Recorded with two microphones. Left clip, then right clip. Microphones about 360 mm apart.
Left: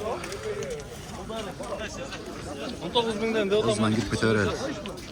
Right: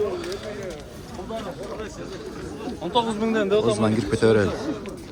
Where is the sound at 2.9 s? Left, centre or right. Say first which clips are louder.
Right 3 dB; right.